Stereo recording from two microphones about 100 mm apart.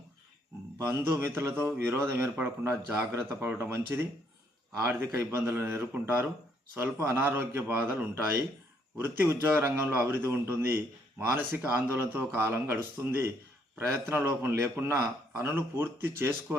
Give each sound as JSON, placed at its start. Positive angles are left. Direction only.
{"t": 0.8, "sound": "a man's voice", "side_deg": -30}